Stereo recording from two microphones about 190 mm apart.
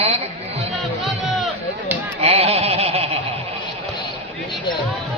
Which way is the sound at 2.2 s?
30° right (ahead or behind).